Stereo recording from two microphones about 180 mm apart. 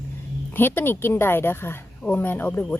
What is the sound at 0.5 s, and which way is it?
A woman's voice, 10° left (ahead or behind).